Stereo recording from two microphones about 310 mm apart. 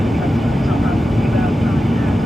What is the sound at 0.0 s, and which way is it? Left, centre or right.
Vehicle, centre.